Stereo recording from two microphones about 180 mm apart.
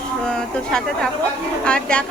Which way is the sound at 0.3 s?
5° left (ahead or behind).